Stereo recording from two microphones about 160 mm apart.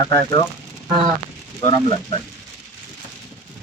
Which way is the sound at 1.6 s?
30° left (ahead or behind).